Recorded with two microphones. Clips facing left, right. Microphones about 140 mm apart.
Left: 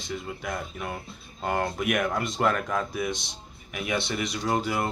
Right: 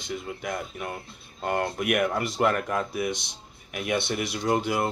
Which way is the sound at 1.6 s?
5° right (ahead or behind).